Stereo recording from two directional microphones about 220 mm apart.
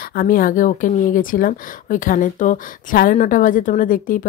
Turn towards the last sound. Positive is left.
turn(degrees=40)  # may be behind; listen again after turning